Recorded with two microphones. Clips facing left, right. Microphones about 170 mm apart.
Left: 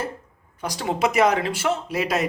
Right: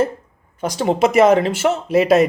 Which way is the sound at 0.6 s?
25° right (ahead or behind).